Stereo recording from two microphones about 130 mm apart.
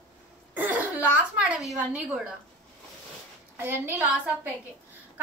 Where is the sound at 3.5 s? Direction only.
15° right (ahead or behind).